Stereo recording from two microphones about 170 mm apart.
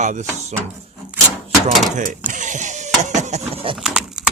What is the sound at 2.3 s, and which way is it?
Vehicle, 45° right (ahead or behind).